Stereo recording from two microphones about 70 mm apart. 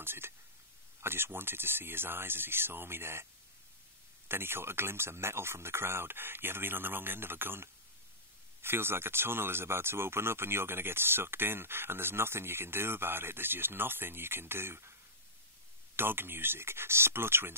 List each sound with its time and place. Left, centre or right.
0.0 s speech: right
4.3 s speech: right
16.0 s speech: right